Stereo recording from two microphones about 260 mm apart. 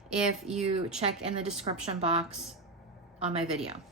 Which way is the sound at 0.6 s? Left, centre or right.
Right.